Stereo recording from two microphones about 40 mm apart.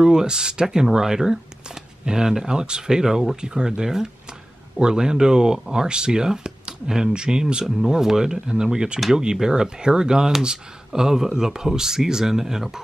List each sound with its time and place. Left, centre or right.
0.0 s speech: centre